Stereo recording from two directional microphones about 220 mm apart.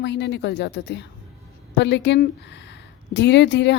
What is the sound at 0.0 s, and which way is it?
A woman's voice, 50° left (ahead or behind).